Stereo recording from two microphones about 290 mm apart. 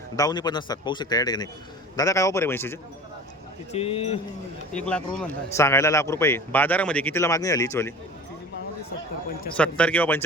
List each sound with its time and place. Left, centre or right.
0.2 s a man's voice: centre
3.7 s speech: centre
4.7 s a man's voice: centre
9.6 s speech: centre